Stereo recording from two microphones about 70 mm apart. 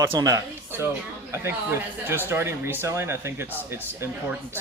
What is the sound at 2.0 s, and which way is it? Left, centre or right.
Speech, right.